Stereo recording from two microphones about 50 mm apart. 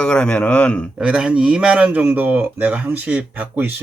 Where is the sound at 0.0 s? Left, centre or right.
Left.